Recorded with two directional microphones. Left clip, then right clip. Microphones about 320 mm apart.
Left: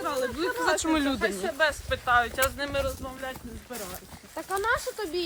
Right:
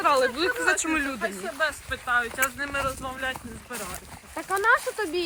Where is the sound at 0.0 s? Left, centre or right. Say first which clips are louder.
Right 8 dB; centre.